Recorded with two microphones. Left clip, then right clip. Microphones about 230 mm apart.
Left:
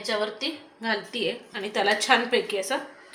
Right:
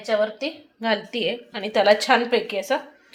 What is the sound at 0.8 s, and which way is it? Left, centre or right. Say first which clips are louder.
A woman's voice: right 5 dB; right.